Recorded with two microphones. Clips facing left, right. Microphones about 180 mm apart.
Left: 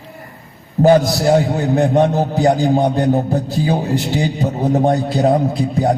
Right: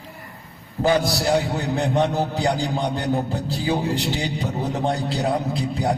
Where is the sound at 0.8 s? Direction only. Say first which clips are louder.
Left 8 dB; 40° left (ahead or behind).